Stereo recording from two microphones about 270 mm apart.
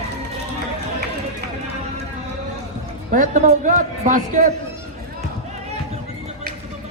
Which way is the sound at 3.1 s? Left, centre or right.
Right.